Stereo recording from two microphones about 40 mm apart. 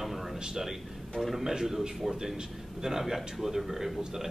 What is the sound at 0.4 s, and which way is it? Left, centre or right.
A man's voice, centre.